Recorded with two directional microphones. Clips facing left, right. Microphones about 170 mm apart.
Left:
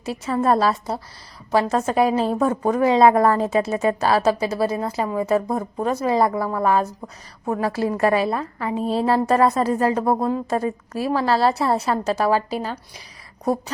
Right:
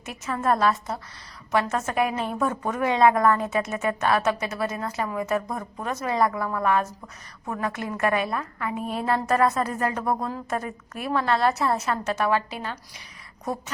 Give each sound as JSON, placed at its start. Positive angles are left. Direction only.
{"t": 0.0, "sound": "a woman's voice", "side_deg": 30}